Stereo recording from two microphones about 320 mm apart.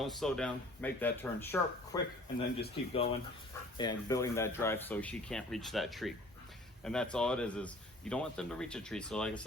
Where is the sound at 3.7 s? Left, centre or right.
Centre.